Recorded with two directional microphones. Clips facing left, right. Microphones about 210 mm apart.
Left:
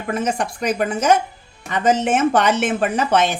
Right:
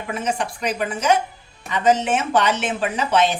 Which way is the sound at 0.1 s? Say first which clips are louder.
Left 3 dB; 45° left (ahead or behind).